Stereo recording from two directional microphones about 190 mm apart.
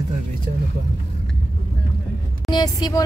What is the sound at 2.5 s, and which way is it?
Speech, 20° left (ahead or behind).